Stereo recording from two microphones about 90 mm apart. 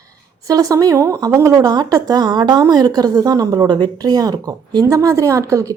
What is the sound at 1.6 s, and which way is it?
A woman's voice, 50° right (ahead or behind).